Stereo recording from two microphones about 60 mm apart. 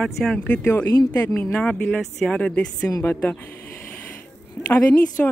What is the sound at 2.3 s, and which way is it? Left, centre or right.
Speech, centre.